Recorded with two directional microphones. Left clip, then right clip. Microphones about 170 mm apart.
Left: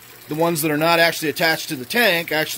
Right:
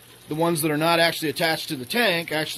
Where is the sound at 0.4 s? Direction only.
5° left (ahead or behind).